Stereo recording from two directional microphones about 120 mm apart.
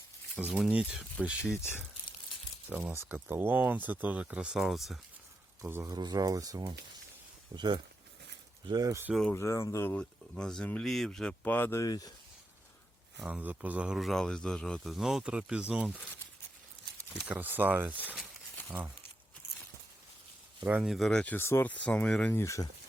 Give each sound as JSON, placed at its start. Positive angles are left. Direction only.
{"t": 0.3, "sound": "speech", "side_deg": -10}
{"t": 1.5, "sound": "speech", "side_deg": 20}
{"t": 2.6, "sound": "speech", "side_deg": -15}
{"t": 5.6, "sound": "speech", "side_deg": -25}
{"t": 9.3, "sound": "speech", "side_deg": 25}
{"t": 10.0, "sound": "speech", "side_deg": 5}
{"t": 11.8, "sound": "speech", "side_deg": 30}
{"t": 13.1, "sound": "speech", "side_deg": -5}
{"t": 17.2, "sound": "speech", "side_deg": -15}
{"t": 20.8, "sound": "speech", "side_deg": 0}
{"t": 21.3, "sound": "speech", "side_deg": 20}
{"t": 22.4, "sound": "speech", "side_deg": 25}